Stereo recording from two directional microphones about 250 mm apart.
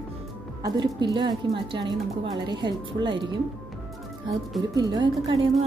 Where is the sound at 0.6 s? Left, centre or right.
Centre.